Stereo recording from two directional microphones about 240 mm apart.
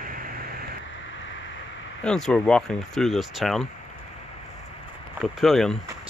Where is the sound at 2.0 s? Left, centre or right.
Centre.